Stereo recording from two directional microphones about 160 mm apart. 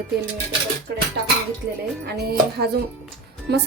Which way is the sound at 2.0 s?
80° right.